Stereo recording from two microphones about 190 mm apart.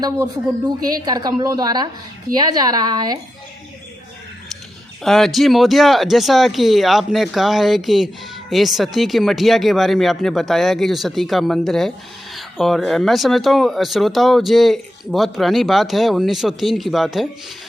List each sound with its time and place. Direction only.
1.0 s a woman's voice: 20° right (ahead or behind)
5.0 s speech: centre (ahead or behind)